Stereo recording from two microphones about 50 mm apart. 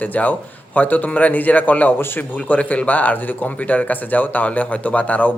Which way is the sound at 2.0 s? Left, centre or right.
Left.